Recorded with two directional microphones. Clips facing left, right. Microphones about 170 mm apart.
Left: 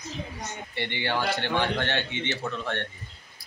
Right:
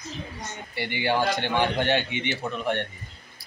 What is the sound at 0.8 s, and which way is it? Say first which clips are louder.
A man's voice: right 4 dB; 10° right (ahead or behind).